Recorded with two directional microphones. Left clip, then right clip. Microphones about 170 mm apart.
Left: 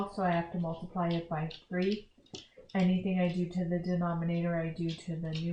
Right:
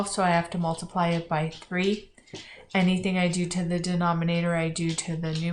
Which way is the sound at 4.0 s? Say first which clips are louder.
Right 9 dB; 30° right (ahead or behind).